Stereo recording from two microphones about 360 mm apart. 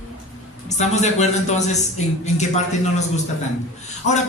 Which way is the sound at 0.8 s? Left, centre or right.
Centre.